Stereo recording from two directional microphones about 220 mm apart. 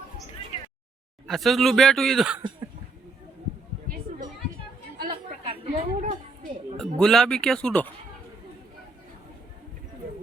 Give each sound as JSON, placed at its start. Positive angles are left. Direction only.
{"t": 0.5, "sound": "a sound", "side_deg": 25}
{"t": 1.3, "sound": "speech", "side_deg": 0}
{"t": 4.9, "sound": "chatter", "side_deg": -20}
{"t": 6.7, "sound": "speech", "side_deg": 0}